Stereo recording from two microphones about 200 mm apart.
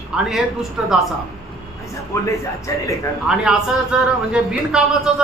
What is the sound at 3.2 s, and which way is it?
A man's voice, 5° right (ahead or behind).